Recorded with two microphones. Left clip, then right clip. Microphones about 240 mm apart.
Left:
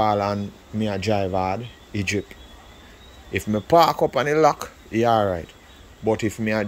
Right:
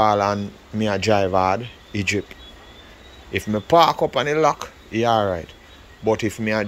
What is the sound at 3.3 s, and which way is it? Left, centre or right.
Speech, centre.